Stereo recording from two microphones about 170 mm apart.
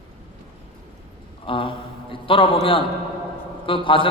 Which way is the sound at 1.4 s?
30° left (ahead or behind).